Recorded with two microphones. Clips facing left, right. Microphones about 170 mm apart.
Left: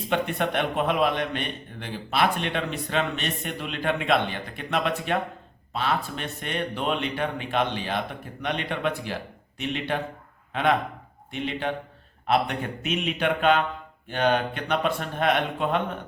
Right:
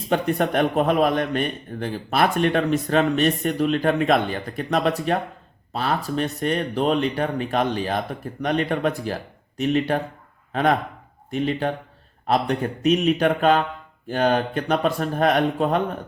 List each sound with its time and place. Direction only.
0.1 s a man's voice: 40° right (ahead or behind)